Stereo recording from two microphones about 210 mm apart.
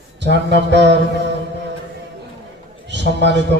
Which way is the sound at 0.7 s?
55° right (ahead or behind).